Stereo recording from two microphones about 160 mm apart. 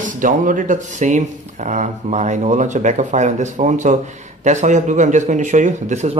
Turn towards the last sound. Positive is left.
turn(degrees=-45)  # may be behind; listen again after turning